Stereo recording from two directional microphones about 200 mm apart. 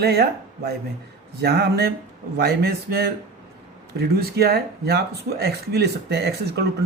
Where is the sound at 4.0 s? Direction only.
50° right (ahead or behind).